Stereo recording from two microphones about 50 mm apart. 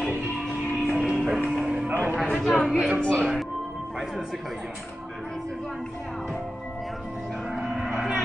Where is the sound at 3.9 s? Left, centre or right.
Centre.